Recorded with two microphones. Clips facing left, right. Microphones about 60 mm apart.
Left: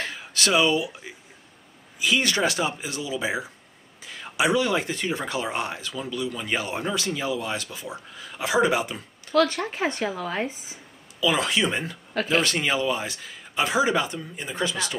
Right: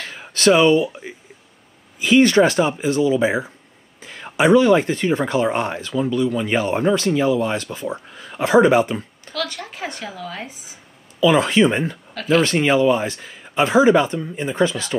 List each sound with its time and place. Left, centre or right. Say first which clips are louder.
0.3 s speech: right 8 dB; right
9.3 s speech: left 6 dB; left
11.1 s speech: right 8 dB; right